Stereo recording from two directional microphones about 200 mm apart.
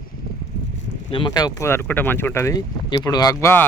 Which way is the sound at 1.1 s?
20° left (ahead or behind).